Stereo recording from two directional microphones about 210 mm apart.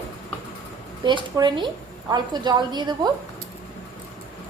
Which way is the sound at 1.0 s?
20° right (ahead or behind).